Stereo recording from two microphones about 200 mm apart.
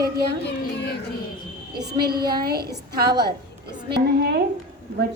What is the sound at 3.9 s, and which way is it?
Speech, 55° right (ahead or behind).